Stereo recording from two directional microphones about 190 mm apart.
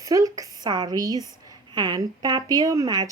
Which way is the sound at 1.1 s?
15° left (ahead or behind).